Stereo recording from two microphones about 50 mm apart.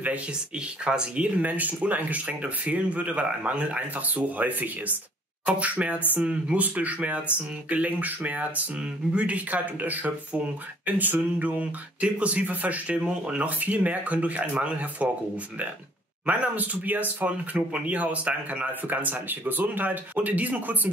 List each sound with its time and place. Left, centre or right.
0.8 s speech: right
16.3 s speech: right